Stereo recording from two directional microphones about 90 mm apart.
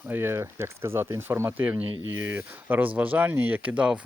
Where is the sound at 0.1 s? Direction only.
25° right (ahead or behind).